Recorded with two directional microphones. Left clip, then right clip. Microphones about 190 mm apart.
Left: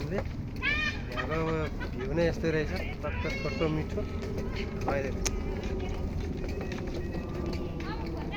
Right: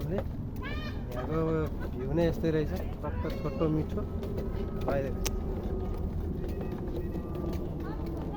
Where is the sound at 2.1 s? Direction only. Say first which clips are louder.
Even; 60° right (ahead or behind).